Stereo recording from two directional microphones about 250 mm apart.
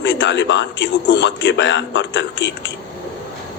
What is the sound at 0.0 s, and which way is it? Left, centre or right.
Speech, left.